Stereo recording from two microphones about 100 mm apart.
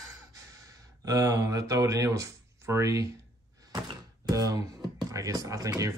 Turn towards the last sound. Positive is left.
turn(degrees=-35)  # may be behind; listen again after turning